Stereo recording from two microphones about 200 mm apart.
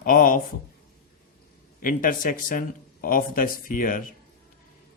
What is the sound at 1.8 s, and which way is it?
Speech, 40° left (ahead or behind).